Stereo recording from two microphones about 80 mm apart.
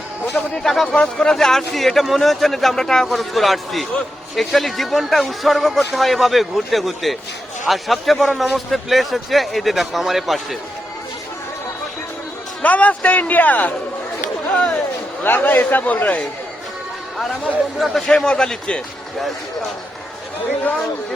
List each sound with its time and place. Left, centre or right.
0.5 s speech: centre
12.6 s a man's voice: centre
17.7 s a man's voice: centre